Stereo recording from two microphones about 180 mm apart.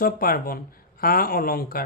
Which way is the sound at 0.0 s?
55° left (ahead or behind).